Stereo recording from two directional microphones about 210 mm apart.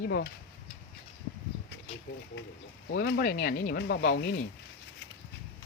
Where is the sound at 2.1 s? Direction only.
50° left (ahead or behind).